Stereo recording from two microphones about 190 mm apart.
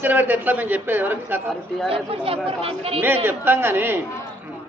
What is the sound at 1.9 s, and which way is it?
Speech, 30° right (ahead or behind).